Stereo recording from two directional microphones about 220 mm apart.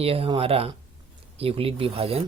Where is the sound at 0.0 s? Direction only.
25° right (ahead or behind).